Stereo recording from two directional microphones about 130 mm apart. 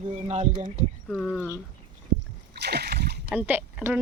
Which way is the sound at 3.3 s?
10° right (ahead or behind).